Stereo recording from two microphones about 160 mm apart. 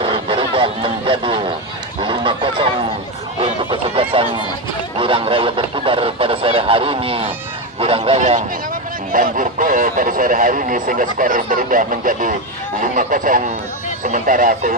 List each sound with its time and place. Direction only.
0.0 s vehicle: 35° right (ahead or behind)
2.0 s honk: 30° right (ahead or behind)
3.4 s a sound: 35° right (ahead or behind)
7.8 s speech: 35° right (ahead or behind)
9.1 s speech: 55° right (ahead or behind)